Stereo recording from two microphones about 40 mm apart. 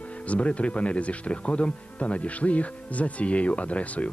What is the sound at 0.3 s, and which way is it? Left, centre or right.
Speech, left.